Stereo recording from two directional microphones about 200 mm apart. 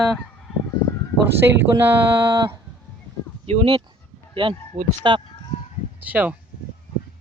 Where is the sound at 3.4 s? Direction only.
30° right (ahead or behind).